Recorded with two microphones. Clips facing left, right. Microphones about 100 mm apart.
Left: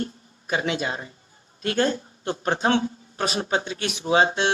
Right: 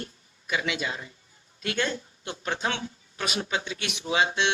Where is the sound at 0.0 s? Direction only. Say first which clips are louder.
Left 9 dB; 40° left (ahead or behind).